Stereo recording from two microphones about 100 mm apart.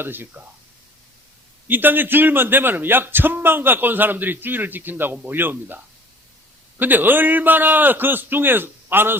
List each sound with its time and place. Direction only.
0.0 s speech: 20° right (ahead or behind)
1.6 s speech: 20° right (ahead or behind)